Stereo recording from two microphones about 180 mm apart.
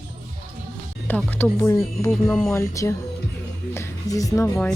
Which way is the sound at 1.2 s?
5° left (ahead or behind).